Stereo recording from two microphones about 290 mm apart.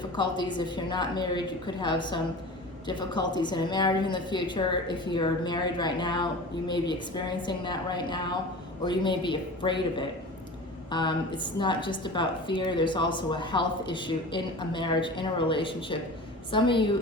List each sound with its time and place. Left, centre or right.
0.2 s a woman's voice: centre